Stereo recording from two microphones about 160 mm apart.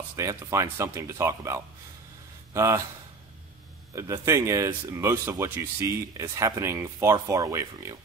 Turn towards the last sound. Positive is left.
turn(degrees=-20)  # may be behind; listen again after turning